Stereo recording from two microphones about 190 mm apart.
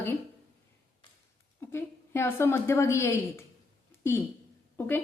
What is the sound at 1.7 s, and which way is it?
A woman's voice, 15° left (ahead or behind).